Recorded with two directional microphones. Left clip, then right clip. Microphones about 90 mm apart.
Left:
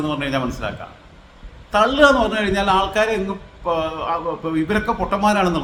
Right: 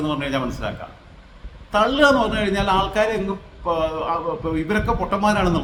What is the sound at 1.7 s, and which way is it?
A man's voice, 15° left (ahead or behind).